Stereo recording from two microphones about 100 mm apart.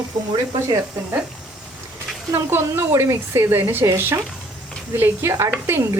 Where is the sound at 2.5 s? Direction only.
25° right (ahead or behind).